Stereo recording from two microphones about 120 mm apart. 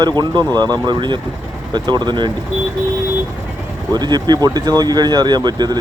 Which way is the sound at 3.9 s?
35° right (ahead or behind).